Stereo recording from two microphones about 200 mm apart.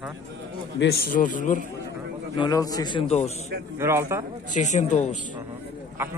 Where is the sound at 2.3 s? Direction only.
20° left (ahead or behind).